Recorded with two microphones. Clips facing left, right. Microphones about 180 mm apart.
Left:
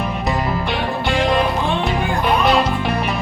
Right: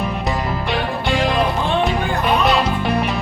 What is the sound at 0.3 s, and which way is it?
Music, centre (ahead or behind).